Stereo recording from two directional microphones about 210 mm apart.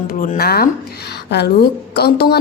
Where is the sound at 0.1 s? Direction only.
40° left (ahead or behind).